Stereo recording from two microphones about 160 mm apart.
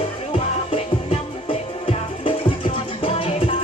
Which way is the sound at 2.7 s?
35° left (ahead or behind).